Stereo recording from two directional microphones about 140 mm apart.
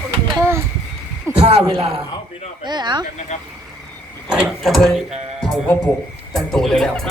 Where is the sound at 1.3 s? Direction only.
45° right (ahead or behind).